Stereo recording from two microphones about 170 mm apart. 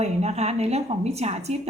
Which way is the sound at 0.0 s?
40° right (ahead or behind).